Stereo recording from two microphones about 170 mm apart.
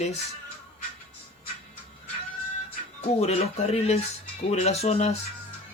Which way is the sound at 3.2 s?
40° left (ahead or behind).